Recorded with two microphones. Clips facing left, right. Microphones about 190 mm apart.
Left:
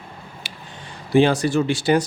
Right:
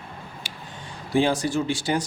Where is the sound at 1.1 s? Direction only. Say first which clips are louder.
Left 5 dB; 65° left (ahead or behind).